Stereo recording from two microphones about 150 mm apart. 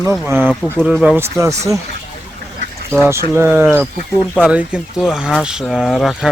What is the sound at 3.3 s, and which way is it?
Speech, 15° right (ahead or behind).